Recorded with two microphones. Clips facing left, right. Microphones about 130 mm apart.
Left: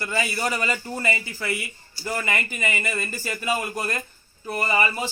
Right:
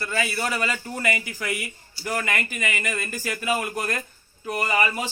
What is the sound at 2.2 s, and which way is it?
A man's voice, 5° left (ahead or behind).